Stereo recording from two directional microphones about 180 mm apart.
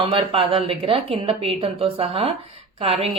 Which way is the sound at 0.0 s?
30° right (ahead or behind).